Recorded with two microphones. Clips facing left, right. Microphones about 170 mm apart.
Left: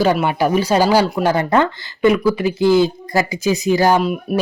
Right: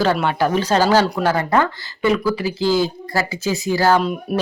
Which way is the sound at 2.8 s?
15° left (ahead or behind).